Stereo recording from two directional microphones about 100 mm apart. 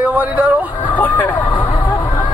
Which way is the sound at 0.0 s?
15° right (ahead or behind).